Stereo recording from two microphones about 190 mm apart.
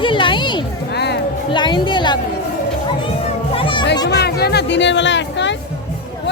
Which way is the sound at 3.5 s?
25° left (ahead or behind).